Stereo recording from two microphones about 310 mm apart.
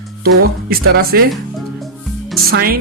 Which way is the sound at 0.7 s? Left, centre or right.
Right.